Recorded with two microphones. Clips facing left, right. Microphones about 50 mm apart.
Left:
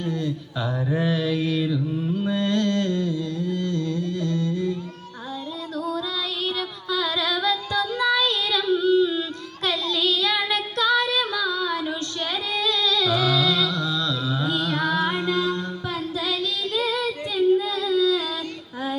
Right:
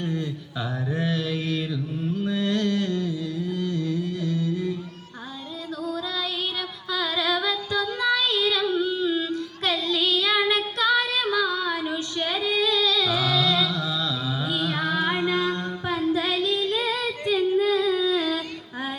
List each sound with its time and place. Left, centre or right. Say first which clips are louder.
0.0 s a sound: left 1 dB; centre
0.9 s mantra: left 4 dB; centre
6.9 s female singing: even; centre
9.6 s child singing: left 1 dB; centre; by 17.3 s right
17.3 s singing: left 1 dB; right